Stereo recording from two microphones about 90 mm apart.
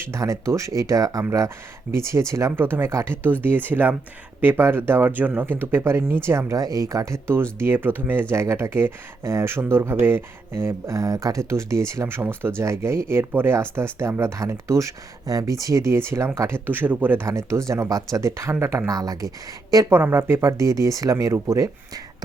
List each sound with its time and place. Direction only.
0.1 s speech: 35° right (ahead or behind)
6.6 s speech: 40° right (ahead or behind)
16.6 s speech: 20° right (ahead or behind)
17.2 s speech: 35° right (ahead or behind)
19.9 s speech: 25° right (ahead or behind)